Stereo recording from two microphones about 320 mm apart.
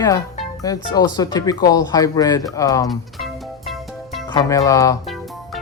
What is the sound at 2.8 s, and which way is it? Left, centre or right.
Music, centre.